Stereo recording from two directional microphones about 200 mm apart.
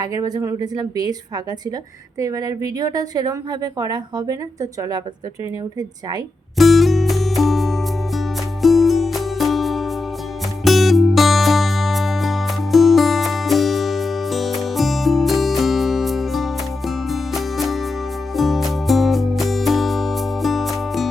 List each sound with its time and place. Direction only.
0.0 s a woman's voice: 20° right (ahead or behind)
2.1 s a woman's voice: 15° right (ahead or behind)
6.6 s music: centre (ahead or behind)